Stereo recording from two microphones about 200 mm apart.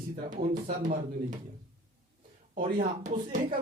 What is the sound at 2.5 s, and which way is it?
Speech, 45° right (ahead or behind).